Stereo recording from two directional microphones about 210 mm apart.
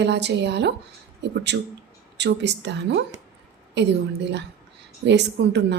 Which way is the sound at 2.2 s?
55° right (ahead or behind).